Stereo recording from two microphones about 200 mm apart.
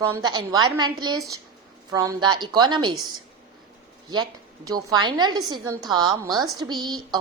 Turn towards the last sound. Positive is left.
turn(degrees=-20)  # may be behind; listen again after turning